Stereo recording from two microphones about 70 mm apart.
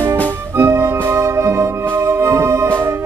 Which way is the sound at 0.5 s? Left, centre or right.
Right.